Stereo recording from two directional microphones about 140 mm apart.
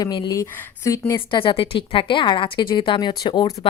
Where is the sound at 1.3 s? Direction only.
35° left (ahead or behind).